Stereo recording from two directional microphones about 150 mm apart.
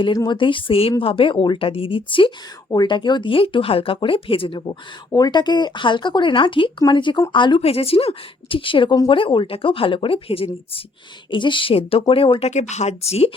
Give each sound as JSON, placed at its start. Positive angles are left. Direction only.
{"t": 0.0, "sound": "speech", "side_deg": 30}